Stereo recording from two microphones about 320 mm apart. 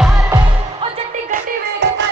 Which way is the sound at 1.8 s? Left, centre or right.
Right.